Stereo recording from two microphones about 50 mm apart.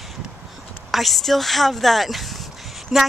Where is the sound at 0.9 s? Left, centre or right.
Centre.